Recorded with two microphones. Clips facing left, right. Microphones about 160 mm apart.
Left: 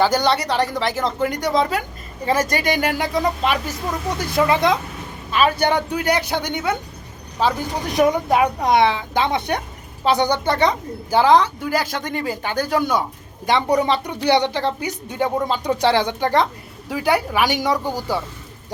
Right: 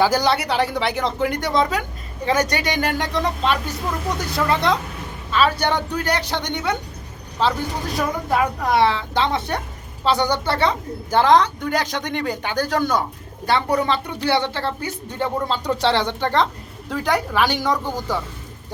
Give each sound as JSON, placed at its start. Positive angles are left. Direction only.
{"t": 0.0, "sound": "a woman's voice", "side_deg": 0}
{"t": 7.9, "sound": "a woman's voice", "side_deg": 20}